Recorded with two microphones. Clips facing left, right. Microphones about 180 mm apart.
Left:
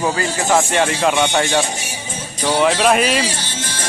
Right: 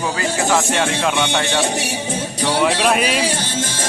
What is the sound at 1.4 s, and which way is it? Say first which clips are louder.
Speech: even; 65° right (ahead or behind).